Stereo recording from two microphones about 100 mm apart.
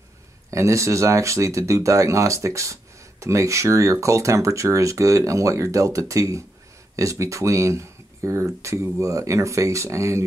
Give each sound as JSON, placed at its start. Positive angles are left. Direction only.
{"t": 0.5, "sound": "speech", "side_deg": -30}